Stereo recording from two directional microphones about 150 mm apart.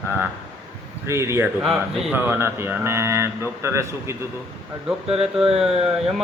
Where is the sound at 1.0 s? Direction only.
20° right (ahead or behind).